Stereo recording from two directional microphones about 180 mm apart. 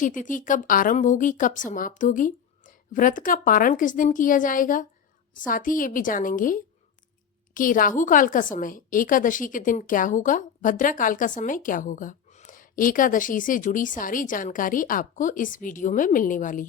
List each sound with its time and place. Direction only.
0.0 s a woman's voice: 45° left (ahead or behind)